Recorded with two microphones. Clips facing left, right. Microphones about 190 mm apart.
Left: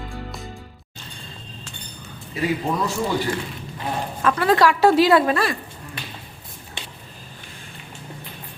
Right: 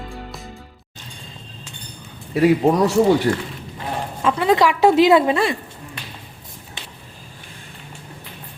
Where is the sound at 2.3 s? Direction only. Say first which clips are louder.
Right 9 dB; 70° right (ahead or behind).